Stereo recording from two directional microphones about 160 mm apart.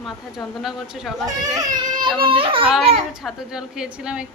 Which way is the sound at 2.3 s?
35° right (ahead or behind).